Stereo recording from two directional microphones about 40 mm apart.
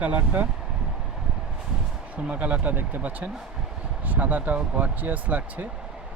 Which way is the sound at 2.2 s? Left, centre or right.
Right.